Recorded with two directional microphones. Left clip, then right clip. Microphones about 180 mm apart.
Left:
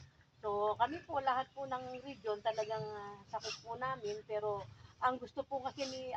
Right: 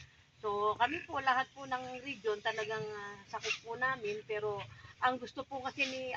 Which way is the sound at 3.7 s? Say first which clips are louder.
Right 3 dB; 30° left (ahead or behind).